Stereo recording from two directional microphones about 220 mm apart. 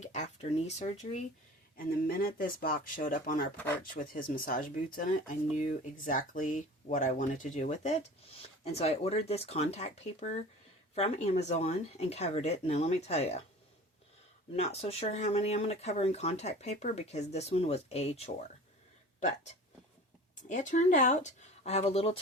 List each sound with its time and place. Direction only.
0.0 s a sound: 30° left (ahead or behind)
0.8 s speech: 30° left (ahead or behind)
1.7 s speech: 40° left (ahead or behind)
14.5 s speech: 30° left (ahead or behind)
20.5 s speech: 35° left (ahead or behind)